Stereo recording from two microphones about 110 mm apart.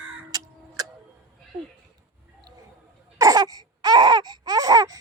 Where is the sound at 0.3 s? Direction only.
35° right (ahead or behind).